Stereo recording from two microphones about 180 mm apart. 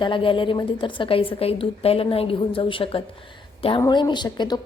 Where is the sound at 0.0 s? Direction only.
30° left (ahead or behind).